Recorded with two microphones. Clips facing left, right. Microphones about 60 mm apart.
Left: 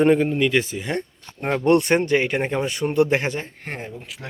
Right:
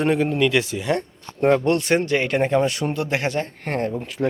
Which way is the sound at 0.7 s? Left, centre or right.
Left.